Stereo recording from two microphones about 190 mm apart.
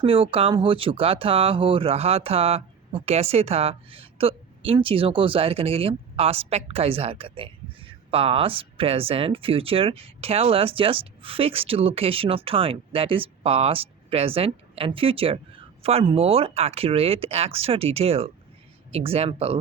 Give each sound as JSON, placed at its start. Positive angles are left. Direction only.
{"t": 0.0, "sound": "speech", "side_deg": -30}